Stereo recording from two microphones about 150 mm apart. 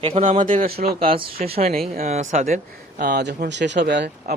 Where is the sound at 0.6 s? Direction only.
90° right.